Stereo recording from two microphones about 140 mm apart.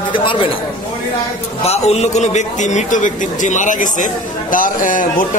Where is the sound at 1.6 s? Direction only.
50° left (ahead or behind).